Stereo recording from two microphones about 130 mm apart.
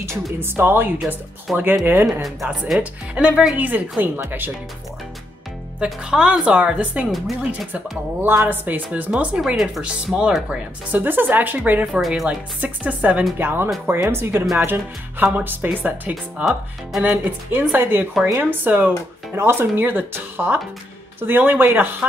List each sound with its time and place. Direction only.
0.0 s speech: 20° right (ahead or behind)
1.5 s speech: centre (ahead or behind); by 4.5 s 15° right (ahead or behind)
5.8 s speech: 5° right (ahead or behind)
8.2 s speech: 15° right (ahead or behind)